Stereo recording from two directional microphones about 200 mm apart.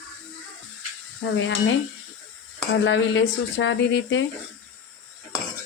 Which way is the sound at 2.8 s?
70° left (ahead or behind).